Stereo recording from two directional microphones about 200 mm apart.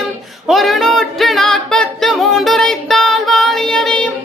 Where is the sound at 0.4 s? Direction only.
Centre (ahead or behind).